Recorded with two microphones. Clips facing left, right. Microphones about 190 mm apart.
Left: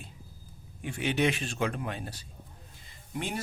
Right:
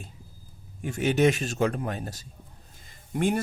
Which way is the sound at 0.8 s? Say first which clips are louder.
Right 6 dB; 45° right (ahead or behind).